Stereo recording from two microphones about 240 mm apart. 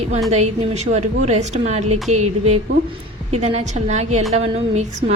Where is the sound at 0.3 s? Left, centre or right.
Right.